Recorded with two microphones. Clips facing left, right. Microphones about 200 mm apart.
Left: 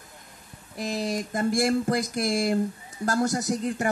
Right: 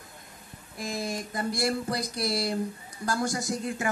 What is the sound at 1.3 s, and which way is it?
Speech, 45° left (ahead or behind).